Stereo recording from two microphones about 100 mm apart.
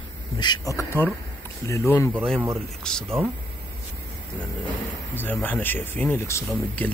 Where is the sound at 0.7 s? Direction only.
25° left (ahead or behind).